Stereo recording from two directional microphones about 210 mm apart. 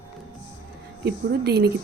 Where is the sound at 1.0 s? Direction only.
50° right (ahead or behind).